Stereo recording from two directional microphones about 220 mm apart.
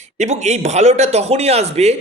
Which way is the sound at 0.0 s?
30° right (ahead or behind).